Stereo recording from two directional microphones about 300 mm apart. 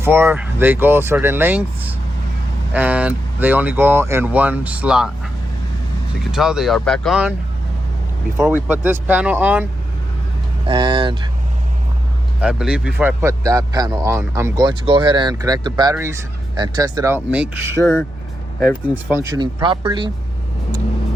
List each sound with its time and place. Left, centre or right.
0.0 s speech: centre
6.3 s speech: centre
8.4 s speech: centre
10.7 s speech: centre
12.4 s speech: centre
19.2 s speech: centre